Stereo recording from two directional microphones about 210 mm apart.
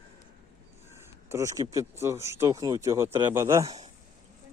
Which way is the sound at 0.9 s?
15° right (ahead or behind).